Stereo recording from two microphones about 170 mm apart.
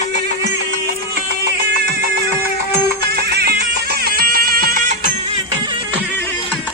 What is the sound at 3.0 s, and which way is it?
Music, 70° right (ahead or behind).